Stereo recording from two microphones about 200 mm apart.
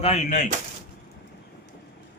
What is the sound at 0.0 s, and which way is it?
Speech, 35° left (ahead or behind).